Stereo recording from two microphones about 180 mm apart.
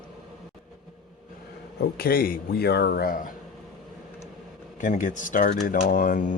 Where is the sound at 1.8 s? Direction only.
60° left (ahead or behind).